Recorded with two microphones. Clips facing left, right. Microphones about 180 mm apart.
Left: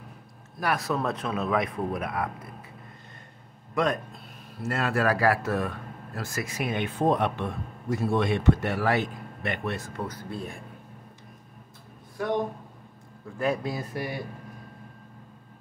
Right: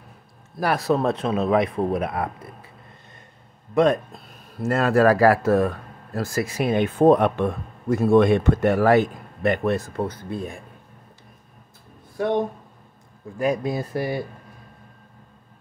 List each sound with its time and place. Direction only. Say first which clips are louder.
0.6 s speech: right 6 dB; 30° right (ahead or behind)
3.7 s speech: right 8 dB; 25° right (ahead or behind)
4.6 s speech: right 8 dB; 45° right (ahead or behind)
7.0 s speech: right 9 dB; 50° right (ahead or behind)
10.0 s speech: right 6 dB; 20° right (ahead or behind)
12.2 s speech: right 5 dB; 25° right (ahead or behind)
13.9 s speech: right 7 dB; 30° right (ahead or behind)